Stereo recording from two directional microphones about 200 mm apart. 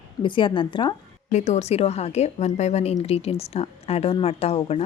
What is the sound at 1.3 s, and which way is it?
Speech, 35° left (ahead or behind).